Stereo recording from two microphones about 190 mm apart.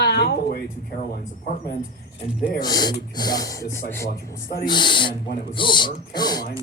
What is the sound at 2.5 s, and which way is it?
Speech, 20° left (ahead or behind).